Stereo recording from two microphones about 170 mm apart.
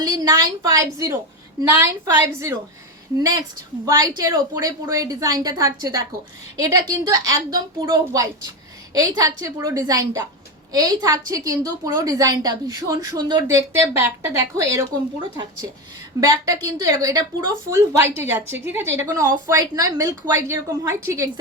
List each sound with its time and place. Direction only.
0.0 s a woman's voice: 20° right (ahead or behind)
16.3 s a woman's voice: 20° right (ahead or behind)